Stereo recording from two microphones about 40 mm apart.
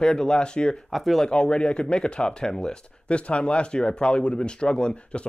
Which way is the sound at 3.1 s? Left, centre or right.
Left.